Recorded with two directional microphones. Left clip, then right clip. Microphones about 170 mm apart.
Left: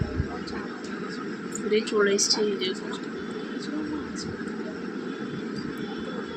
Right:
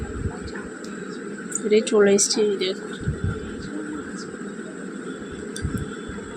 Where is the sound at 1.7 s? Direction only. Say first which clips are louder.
Right 6 dB; 35° right (ahead or behind).